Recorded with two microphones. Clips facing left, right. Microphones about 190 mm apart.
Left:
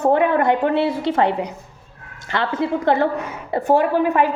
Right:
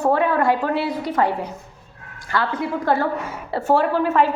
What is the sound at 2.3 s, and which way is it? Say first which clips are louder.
A woman's voice: left 2 dB; 25° left (ahead or behind).